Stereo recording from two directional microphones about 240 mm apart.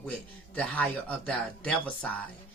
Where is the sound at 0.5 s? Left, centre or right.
Centre.